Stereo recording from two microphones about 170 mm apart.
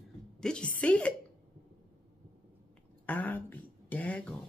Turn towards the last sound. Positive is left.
turn(degrees=5)  # may be behind; listen again after turning